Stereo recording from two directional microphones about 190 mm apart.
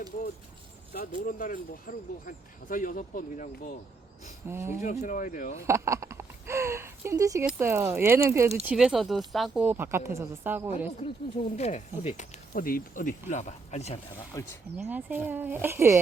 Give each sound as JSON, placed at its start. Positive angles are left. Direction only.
{"t": 0.9, "sound": "speech", "side_deg": 45}
{"t": 4.4, "sound": "speech", "side_deg": -15}
{"t": 4.8, "sound": "speech", "side_deg": 40}
{"t": 5.6, "sound": "a sound", "side_deg": -15}
{"t": 7.4, "sound": "speech", "side_deg": -15}
{"t": 11.0, "sound": "speech", "side_deg": 30}
{"t": 14.4, "sound": "speech", "side_deg": 15}
{"t": 14.8, "sound": "speech", "side_deg": -10}